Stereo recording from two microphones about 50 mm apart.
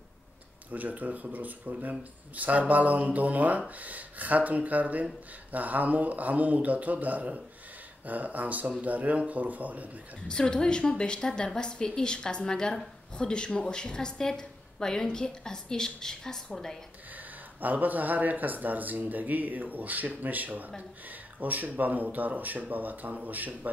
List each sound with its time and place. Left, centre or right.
0.7 s speech: right
10.2 s a woman's voice: centre
17.6 s speech: right